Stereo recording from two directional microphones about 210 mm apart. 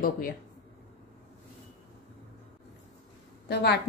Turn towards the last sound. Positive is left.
turn(degrees=50)  # may be behind; listen again after turning